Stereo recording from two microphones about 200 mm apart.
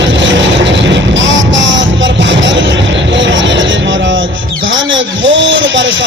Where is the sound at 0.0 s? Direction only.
60° right (ahead or behind).